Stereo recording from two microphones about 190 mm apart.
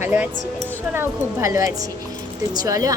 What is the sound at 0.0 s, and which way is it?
A woman's voice, 10° right (ahead or behind).